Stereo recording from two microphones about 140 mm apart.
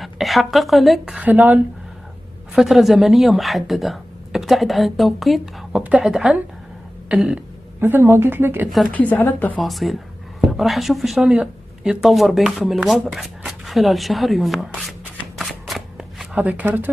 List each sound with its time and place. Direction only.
0.0 s a woman's voice: centre (ahead or behind)
2.5 s a woman's voice: centre (ahead or behind)
7.1 s throat clearing: 5° right (ahead or behind)
7.8 s speech: 15° right (ahead or behind)
8.9 s a woman's voice: 10° left (ahead or behind)
9.6 s a woman's voice: centre (ahead or behind)